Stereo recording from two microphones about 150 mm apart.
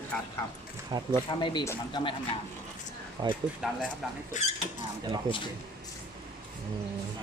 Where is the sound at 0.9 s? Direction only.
25° right (ahead or behind).